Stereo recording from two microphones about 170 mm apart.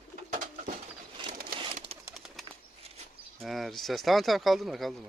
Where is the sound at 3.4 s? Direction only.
Centre (ahead or behind).